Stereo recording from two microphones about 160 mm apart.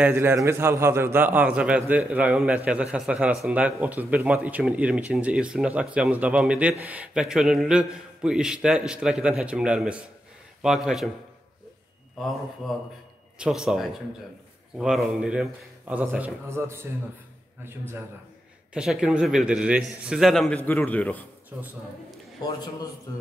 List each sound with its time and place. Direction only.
0.0 s a man's voice: 15° right (ahead or behind)
12.6 s a man's voice: centre (ahead or behind); by 16.8 s 15° right (ahead or behind)
18.7 s a man's voice: 5° right (ahead or behind)
22.4 s a man's voice: 25° left (ahead or behind)